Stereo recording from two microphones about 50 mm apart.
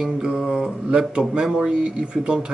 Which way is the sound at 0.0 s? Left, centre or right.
Centre.